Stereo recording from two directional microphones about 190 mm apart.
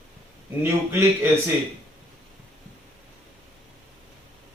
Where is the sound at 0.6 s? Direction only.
10° right (ahead or behind).